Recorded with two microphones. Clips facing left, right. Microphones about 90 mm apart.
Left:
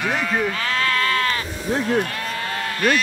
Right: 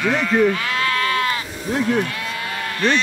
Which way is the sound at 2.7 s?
25° right (ahead or behind).